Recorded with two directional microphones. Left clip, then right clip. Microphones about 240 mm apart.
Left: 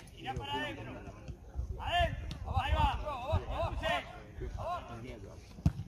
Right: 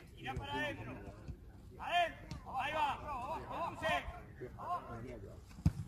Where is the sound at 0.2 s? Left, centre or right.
Centre.